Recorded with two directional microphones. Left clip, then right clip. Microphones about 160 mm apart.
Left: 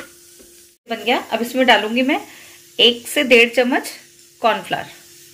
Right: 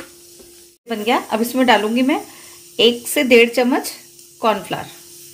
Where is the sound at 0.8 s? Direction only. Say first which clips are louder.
Right 1 dB; 70° right (ahead or behind); by 4.8 s 50° right (ahead or behind).